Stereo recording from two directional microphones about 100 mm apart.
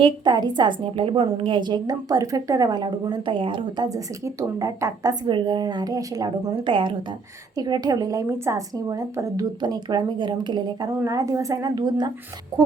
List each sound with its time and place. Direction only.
0.0 s a woman's voice: 45° right (ahead or behind)
3.8 s a woman's voice: 35° right (ahead or behind)
5.3 s a woman's voice: 55° right (ahead or behind)
6.7 s a woman's voice: 55° right (ahead or behind)
7.5 s a woman's voice: 45° right (ahead or behind)
11.1 s a woman's voice: 35° right (ahead or behind)